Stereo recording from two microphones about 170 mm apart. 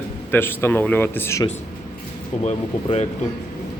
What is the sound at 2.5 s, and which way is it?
Speech, 40° left (ahead or behind).